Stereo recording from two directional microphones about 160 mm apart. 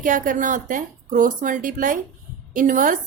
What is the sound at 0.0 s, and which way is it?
A woman's voice, 55° right (ahead or behind).